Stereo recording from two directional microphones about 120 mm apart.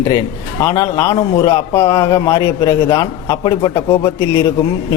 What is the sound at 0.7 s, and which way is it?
A man's voice, 30° left (ahead or behind).